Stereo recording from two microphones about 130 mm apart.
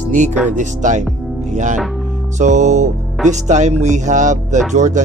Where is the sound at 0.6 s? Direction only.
70° right (ahead or behind).